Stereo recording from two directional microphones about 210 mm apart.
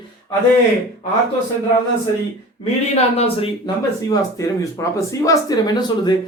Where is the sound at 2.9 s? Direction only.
30° left (ahead or behind).